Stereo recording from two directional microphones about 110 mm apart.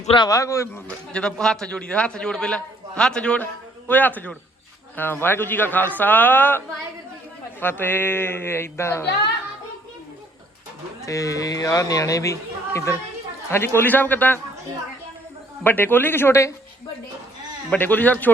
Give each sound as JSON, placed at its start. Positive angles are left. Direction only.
{"t": 0.3, "sound": "speech", "side_deg": 30}
{"t": 0.9, "sound": "a man's voice", "side_deg": 5}
{"t": 7.6, "sound": "speech", "side_deg": 20}
{"t": 11.0, "sound": "a man's voice", "side_deg": 30}
{"t": 15.6, "sound": "speech", "side_deg": 15}
{"t": 17.7, "sound": "a man's voice", "side_deg": 15}